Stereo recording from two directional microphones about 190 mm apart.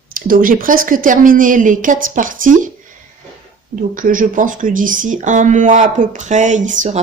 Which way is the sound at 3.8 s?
45° right (ahead or behind).